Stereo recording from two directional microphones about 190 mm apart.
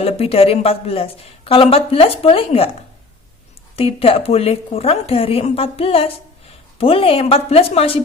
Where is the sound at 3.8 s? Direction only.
30° left (ahead or behind).